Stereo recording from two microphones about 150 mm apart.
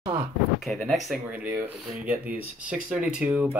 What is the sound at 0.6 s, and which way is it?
Speech, centre (ahead or behind).